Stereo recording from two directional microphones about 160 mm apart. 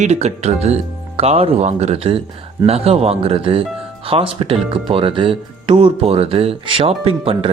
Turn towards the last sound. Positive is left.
turn(degrees=-35)  # may be behind; listen again after turning